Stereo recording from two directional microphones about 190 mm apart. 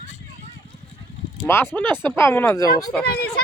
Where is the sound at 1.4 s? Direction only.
10° left (ahead or behind).